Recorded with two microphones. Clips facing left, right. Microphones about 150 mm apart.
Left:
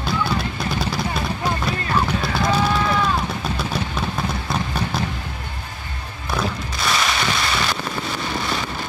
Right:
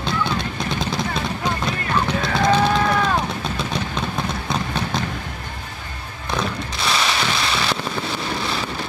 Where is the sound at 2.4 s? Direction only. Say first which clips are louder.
Right 3 dB; 55° right (ahead or behind).